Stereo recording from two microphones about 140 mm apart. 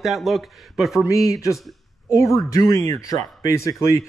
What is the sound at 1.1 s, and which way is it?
Speech, 25° left (ahead or behind).